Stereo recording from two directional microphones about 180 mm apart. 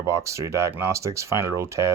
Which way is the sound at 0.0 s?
15° right (ahead or behind).